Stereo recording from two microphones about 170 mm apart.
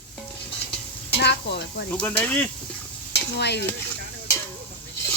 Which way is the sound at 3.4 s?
80° left.